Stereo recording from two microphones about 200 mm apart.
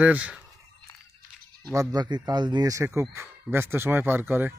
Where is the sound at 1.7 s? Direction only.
20° right (ahead or behind).